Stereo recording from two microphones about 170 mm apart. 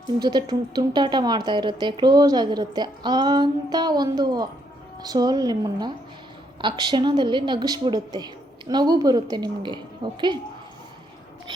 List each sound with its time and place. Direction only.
0.2 s speech: 25° right (ahead or behind)